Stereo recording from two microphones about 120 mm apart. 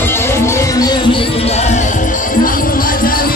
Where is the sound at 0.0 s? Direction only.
20° left (ahead or behind); by 2.2 s 90° left.